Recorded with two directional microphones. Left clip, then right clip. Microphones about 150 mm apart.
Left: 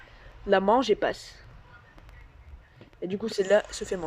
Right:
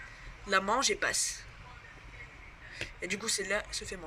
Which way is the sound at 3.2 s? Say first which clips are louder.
Left 12 dB; 50° left (ahead or behind).